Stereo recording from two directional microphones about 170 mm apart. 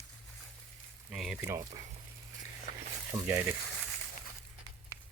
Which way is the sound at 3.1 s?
10° right (ahead or behind).